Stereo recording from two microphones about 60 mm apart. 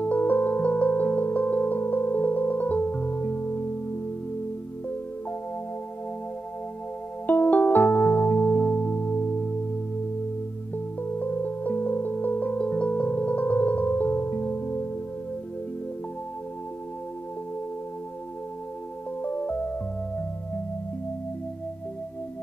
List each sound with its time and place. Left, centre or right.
0.0 s singing bowl: left
7.2 s music: left
11.0 s music: left
19.2 s music: left